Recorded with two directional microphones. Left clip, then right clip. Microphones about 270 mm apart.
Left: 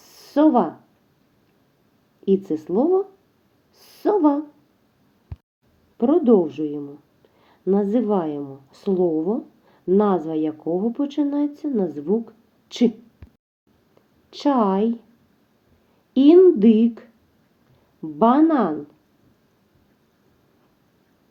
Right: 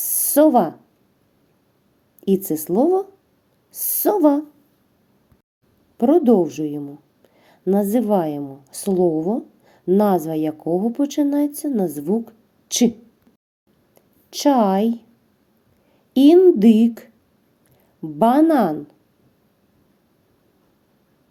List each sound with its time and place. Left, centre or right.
0.0 s a sound: right
2.2 s speech: right
3.7 s a sound: right
6.0 s a woman's voice: right
14.3 s a woman's voice: right
16.1 s a woman's voice: right